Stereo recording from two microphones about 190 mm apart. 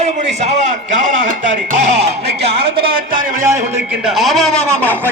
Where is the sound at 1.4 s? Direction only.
70° right (ahead or behind).